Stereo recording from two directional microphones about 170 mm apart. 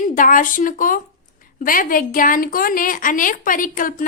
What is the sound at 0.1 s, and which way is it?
A woman's voice, 50° left (ahead or behind).